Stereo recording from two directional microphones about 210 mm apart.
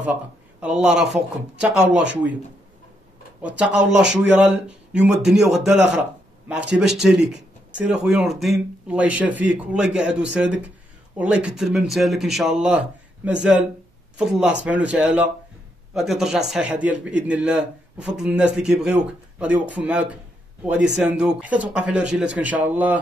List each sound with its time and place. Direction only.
0.0 s a sound: 5° right (ahead or behind)
0.7 s a man's voice: 5° right (ahead or behind)
1.9 s speech: 55° right (ahead or behind)
3.4 s a man's voice: 5° right (ahead or behind)